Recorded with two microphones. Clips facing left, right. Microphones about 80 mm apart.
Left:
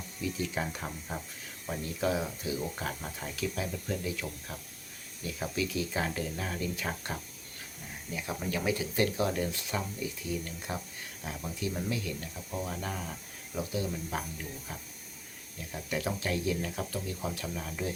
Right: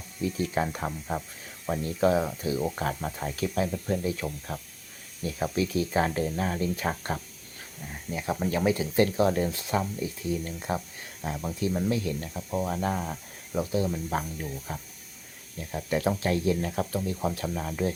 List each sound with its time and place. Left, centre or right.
0.3 s speech: right